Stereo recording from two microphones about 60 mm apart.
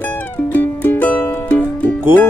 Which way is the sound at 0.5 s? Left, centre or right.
Left.